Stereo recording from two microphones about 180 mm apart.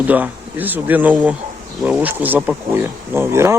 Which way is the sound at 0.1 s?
10° right (ahead or behind).